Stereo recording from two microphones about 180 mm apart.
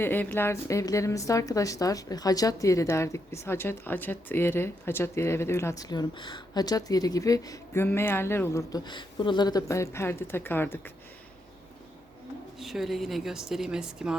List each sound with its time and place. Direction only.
0.0 s a woman's voice: 10° left (ahead or behind)
12.5 s a woman's voice: centre (ahead or behind)